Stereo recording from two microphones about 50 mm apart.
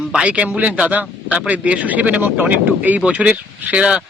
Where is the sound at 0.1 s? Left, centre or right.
Right.